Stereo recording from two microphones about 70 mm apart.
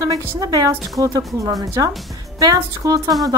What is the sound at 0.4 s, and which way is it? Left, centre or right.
Speech, right.